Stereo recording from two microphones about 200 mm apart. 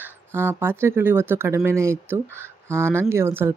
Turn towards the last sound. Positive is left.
turn(degrees=-10)  # may be behind; listen again after turning